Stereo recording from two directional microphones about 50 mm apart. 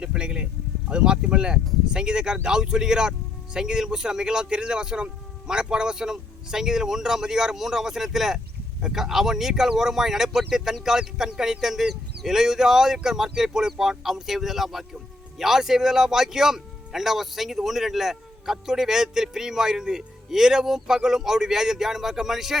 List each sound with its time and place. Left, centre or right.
0.0 s a man's voice: centre